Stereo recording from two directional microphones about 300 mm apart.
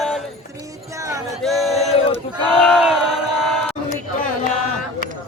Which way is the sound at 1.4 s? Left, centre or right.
Centre.